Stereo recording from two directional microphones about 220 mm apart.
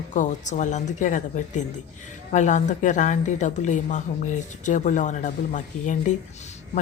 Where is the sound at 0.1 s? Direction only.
35° left (ahead or behind).